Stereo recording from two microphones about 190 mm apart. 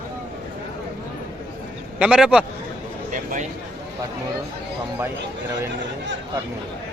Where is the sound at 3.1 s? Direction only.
45° right (ahead or behind).